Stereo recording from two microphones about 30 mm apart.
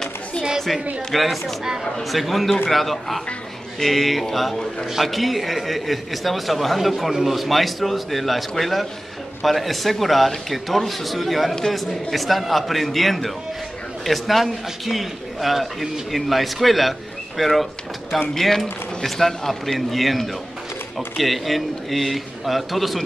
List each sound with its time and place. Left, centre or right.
0.7 s speech: right
1.1 s a man's voice: centre
19.0 s a man's voice: centre